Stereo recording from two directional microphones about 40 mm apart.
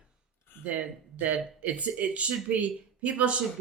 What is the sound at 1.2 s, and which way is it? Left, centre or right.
Speech, right.